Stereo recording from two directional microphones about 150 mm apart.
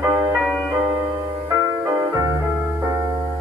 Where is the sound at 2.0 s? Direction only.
20° right (ahead or behind).